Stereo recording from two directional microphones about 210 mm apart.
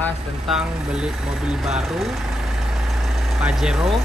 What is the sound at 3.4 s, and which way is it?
Speech, 5° right (ahead or behind).